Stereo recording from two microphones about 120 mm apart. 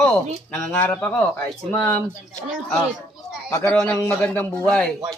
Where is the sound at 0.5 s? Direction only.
10° left (ahead or behind).